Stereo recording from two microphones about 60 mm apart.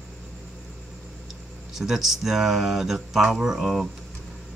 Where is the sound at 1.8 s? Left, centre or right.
Centre.